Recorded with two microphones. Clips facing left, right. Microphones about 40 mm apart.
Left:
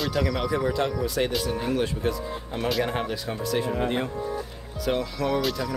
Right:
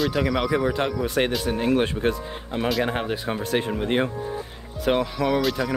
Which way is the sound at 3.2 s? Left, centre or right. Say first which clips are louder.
Right 2 dB; right.